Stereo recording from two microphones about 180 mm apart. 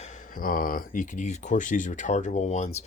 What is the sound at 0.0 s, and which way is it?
Speech, 45° left (ahead or behind).